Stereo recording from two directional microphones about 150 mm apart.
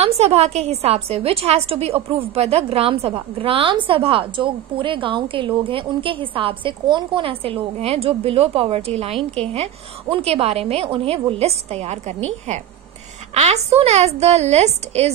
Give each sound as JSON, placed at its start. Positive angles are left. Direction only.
{"t": 0.0, "sound": "a woman's voice", "side_deg": -45}